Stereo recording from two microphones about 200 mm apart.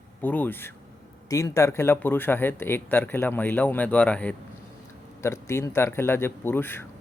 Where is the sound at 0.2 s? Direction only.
10° left (ahead or behind).